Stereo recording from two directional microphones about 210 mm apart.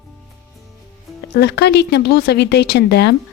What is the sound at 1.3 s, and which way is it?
A woman's voice, 50° left (ahead or behind).